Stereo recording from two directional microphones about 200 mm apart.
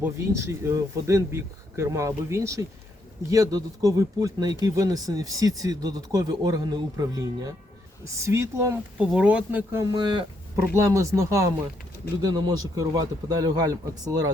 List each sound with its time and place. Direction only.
0.0 s speech: 15° right (ahead or behind)
9.8 s speech: 20° right (ahead or behind)